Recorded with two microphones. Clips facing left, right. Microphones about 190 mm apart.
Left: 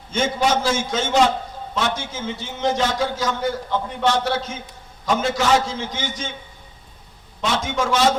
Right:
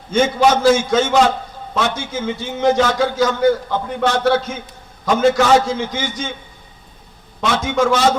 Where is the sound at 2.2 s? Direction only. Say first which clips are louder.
Right 7 dB; 60° right (ahead or behind).